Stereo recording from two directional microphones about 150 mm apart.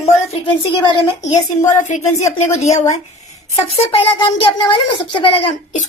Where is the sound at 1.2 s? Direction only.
55° left (ahead or behind).